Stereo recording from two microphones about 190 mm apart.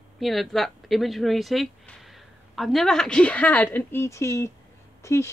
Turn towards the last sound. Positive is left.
turn(degrees=15)  # may be behind; listen again after turning